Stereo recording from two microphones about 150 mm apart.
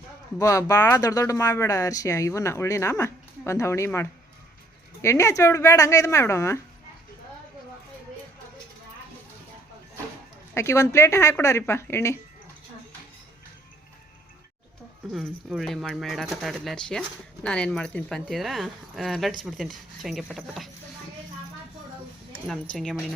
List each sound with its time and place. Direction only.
0.3 s speech: 20° left (ahead or behind)
10.5 s speech: 20° left (ahead or behind)
15.1 s speech: centre (ahead or behind)
22.7 s speech: 5° left (ahead or behind)